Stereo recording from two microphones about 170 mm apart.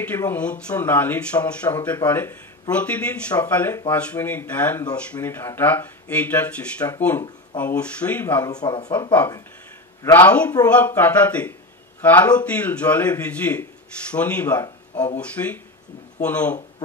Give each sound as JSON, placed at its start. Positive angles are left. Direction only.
{"t": 0.0, "sound": "speech", "side_deg": 10}
{"t": 8.5, "sound": "speech", "side_deg": 25}
{"t": 10.1, "sound": "speech", "side_deg": 10}